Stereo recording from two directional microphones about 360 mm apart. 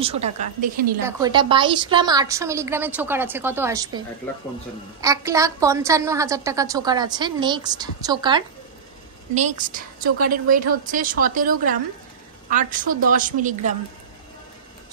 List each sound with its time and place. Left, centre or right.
0.0 s a woman's voice: centre
5.0 s a woman's voice: centre